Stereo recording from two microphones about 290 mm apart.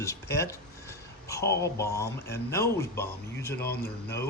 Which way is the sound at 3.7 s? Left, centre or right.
Left.